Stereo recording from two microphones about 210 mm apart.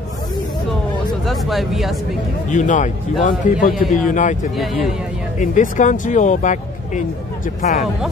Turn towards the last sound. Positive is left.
turn(degrees=35)  # may be behind; listen again after turning